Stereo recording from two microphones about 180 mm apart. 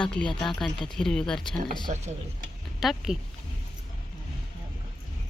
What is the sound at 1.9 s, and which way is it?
Stir, 40° right (ahead or behind).